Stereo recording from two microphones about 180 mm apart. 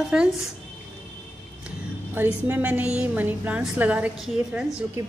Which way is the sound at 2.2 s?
10° right (ahead or behind).